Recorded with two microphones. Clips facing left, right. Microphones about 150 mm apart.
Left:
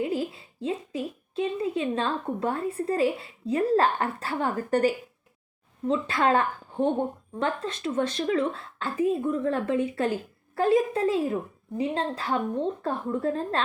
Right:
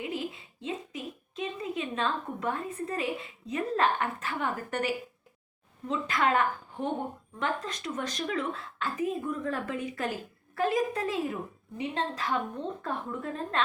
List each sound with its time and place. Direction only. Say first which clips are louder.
0.0 s a woman's voice: left 6 dB; 35° left (ahead or behind)